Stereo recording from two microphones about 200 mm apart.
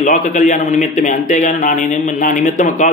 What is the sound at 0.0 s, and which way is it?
A man's voice, 40° left (ahead or behind).